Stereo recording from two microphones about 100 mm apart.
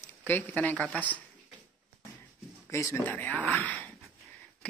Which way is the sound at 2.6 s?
30° left (ahead or behind).